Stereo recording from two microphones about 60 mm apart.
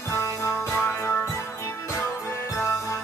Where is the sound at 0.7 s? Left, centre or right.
Left.